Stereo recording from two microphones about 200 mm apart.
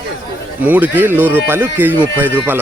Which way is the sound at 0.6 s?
10° right (ahead or behind).